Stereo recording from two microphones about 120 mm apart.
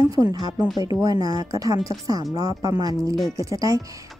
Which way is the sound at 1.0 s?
30° right (ahead or behind).